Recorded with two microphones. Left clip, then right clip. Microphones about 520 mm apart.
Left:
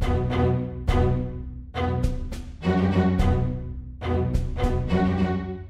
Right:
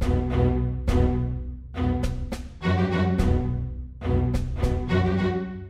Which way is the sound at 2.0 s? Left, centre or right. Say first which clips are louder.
Right 1 dB; centre.